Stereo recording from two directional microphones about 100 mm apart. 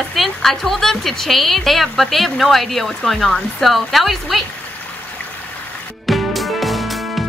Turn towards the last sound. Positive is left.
turn(degrees=0)  # may be behind; listen again after turning